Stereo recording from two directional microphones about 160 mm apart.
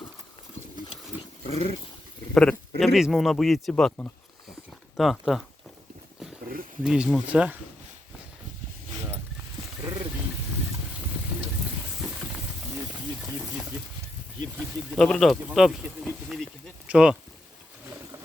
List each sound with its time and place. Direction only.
1.5 s speech: 35° left (ahead or behind)
2.3 s speech: 5° left (ahead or behind)
6.8 s speech: 5° right (ahead or behind)
14.9 s speech: 5° left (ahead or behind)